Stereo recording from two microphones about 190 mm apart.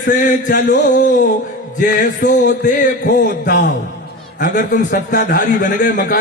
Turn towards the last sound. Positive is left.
turn(degrees=45)  # may be behind; listen again after turning